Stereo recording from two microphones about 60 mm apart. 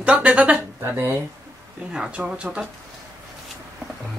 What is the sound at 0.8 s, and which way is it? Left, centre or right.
Speech, right.